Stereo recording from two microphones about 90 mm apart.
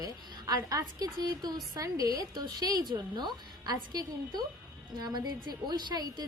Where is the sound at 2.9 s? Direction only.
55° right (ahead or behind).